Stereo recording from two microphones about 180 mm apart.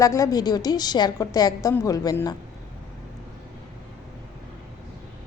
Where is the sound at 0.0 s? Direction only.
20° left (ahead or behind).